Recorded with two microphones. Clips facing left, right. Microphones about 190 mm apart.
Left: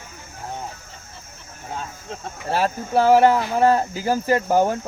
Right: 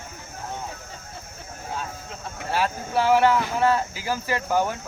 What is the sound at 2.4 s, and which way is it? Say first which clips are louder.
Speech: left 3 dB; 40° left (ahead or behind).